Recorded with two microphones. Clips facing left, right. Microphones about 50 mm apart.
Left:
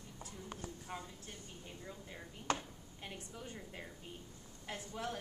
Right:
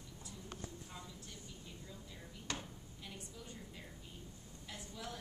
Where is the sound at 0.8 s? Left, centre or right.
Left.